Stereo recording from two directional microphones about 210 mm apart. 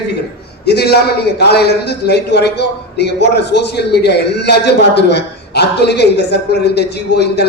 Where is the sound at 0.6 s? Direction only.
50° left (ahead or behind).